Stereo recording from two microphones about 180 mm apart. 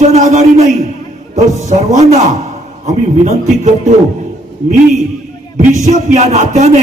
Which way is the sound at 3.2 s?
40° right (ahead or behind).